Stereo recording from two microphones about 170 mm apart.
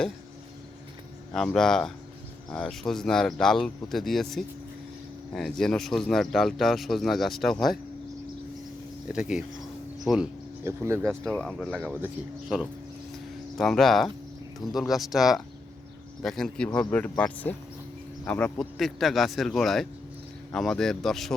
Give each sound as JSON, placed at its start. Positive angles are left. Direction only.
{"t": 1.3, "sound": "speech", "side_deg": 5}
{"t": 9.0, "sound": "speech", "side_deg": -5}
{"t": 10.6, "sound": "speech", "side_deg": -15}
{"t": 11.2, "sound": "speech", "side_deg": 5}
{"t": 11.7, "sound": "speech", "side_deg": -10}